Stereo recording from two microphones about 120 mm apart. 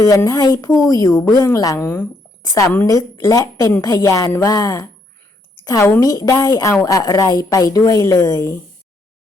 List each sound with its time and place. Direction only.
0.0 s a woman's voice: 30° left (ahead or behind)
1.8 s speech: 20° left (ahead or behind)
2.4 s a woman's voice: 30° left (ahead or behind)